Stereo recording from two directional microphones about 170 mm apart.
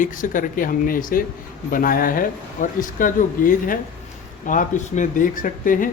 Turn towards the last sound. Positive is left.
turn(degrees=50)  # may be behind; listen again after turning